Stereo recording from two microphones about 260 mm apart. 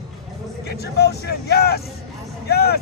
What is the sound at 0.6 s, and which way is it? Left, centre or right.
Speech, left.